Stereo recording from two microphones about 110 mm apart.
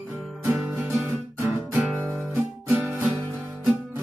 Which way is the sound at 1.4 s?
15° right (ahead or behind).